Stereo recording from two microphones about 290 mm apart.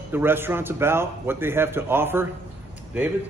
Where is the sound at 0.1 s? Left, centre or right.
Centre.